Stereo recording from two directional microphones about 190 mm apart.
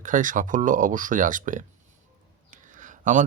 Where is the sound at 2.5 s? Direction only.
40° right (ahead or behind).